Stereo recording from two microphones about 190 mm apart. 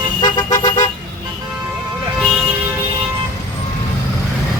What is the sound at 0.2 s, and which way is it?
Vehicle, 20° left (ahead or behind).